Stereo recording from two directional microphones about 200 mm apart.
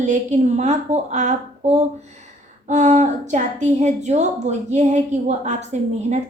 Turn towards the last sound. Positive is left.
turn(degrees=-35)  # may be behind; listen again after turning